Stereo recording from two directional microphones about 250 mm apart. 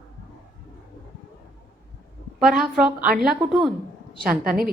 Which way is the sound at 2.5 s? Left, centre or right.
Centre.